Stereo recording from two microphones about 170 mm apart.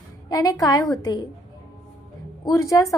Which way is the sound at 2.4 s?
20° left (ahead or behind).